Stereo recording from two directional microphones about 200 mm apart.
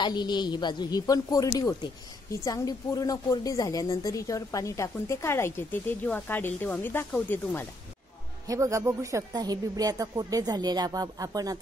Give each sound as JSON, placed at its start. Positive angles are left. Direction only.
{"t": 0.0, "sound": "a woman's voice", "side_deg": 20}
{"t": 8.5, "sound": "speech", "side_deg": -15}